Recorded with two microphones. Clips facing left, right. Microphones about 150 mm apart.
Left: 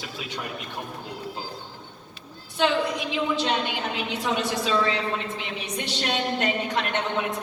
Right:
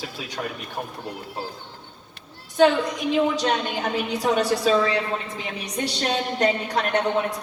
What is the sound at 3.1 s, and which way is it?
A woman's voice, 45° right (ahead or behind).